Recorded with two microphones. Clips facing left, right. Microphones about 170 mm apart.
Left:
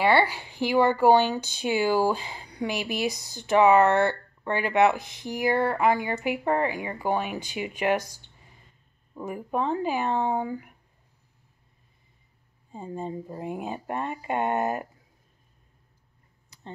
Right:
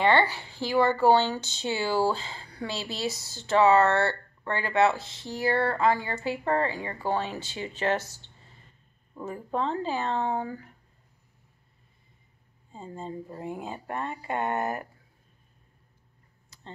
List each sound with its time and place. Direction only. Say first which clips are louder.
0.0 s a woman's voice: left 1 dB; 10° left (ahead or behind)
12.7 s a woman's voice: left 4 dB; 15° left (ahead or behind)